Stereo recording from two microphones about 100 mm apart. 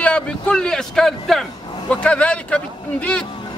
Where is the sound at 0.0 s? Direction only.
10° left (ahead or behind).